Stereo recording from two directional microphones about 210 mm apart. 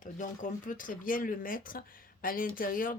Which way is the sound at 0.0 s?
40° left (ahead or behind).